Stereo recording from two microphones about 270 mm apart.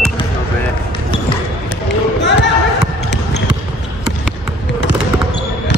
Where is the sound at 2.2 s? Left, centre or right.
Left.